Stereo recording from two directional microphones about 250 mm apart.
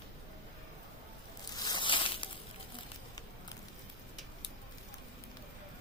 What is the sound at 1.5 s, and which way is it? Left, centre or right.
Crushing, centre.